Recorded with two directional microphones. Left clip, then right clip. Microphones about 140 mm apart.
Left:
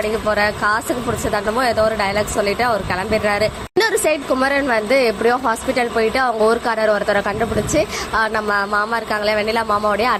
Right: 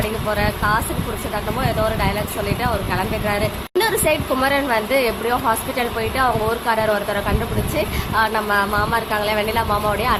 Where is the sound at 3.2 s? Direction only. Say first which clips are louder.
Left 4 dB; 45° left (ahead or behind).